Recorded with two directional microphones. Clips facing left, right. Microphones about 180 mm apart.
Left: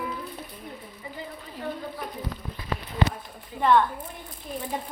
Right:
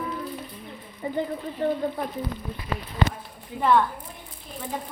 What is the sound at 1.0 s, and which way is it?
Speech, 45° right (ahead or behind).